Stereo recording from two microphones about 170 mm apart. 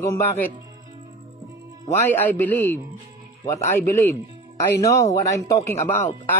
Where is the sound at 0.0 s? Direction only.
15° left (ahead or behind).